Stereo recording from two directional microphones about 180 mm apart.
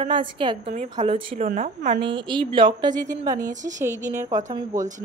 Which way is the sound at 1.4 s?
45° right (ahead or behind).